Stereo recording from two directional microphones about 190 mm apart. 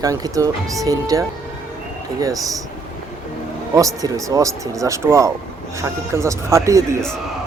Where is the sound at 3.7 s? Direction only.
20° right (ahead or behind).